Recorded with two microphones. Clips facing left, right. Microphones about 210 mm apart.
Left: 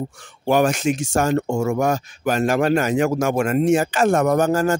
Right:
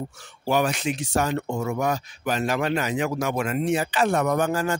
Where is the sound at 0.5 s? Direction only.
45° left (ahead or behind).